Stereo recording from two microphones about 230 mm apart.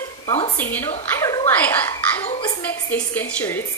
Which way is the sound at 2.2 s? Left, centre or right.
Left.